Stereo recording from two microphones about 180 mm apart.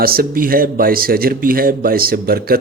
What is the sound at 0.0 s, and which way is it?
A man's voice, 55° right (ahead or behind).